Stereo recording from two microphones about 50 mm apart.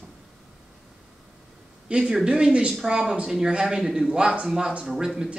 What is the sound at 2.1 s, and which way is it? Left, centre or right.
Speech, centre.